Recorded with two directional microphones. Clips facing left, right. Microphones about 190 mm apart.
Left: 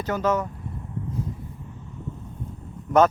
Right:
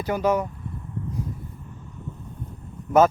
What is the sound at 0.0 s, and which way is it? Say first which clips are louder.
Speech: right 1 dB; 10° right (ahead or behind).